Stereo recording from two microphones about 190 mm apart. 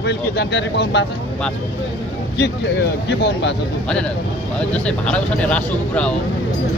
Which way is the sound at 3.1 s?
65° left (ahead or behind).